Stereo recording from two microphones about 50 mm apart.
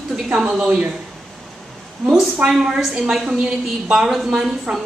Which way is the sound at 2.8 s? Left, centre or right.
Centre.